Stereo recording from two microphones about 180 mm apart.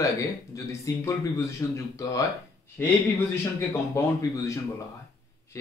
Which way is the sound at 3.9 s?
15° left (ahead or behind).